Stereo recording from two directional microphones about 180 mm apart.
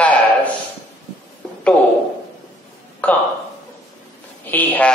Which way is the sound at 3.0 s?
10° left (ahead or behind).